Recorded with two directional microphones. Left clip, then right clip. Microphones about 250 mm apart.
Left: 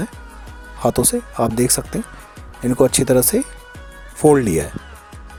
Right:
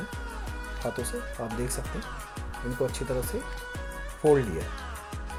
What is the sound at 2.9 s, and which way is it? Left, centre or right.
Speech, left.